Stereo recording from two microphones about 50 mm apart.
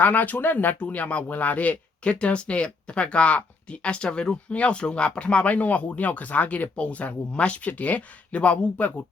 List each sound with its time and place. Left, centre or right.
0.0 s speech: left